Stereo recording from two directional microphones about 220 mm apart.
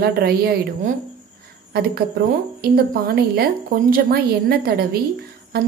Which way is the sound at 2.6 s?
45° right (ahead or behind).